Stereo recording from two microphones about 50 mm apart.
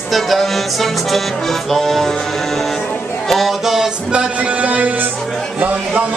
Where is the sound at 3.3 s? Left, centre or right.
Centre.